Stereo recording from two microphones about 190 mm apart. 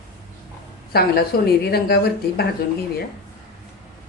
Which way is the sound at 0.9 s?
55° left (ahead or behind).